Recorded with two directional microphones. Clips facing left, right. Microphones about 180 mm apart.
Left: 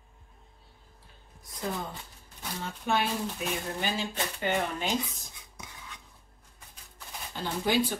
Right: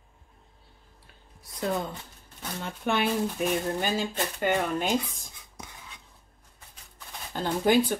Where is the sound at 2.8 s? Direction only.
60° right (ahead or behind).